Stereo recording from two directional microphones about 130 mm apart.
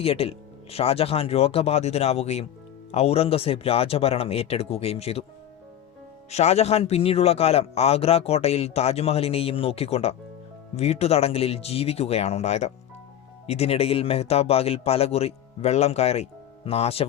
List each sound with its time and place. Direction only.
0.0 s a man's voice: 45° left (ahead or behind)
6.3 s a man's voice: 55° left (ahead or behind)